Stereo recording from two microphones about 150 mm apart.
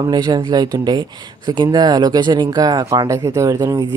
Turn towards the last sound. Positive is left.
turn(degrees=-20)  # may be behind; listen again after turning